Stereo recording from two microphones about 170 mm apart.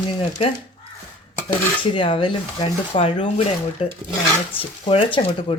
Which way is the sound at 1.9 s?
30° left (ahead or behind).